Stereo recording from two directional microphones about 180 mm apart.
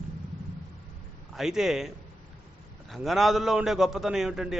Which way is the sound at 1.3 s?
Centre (ahead or behind).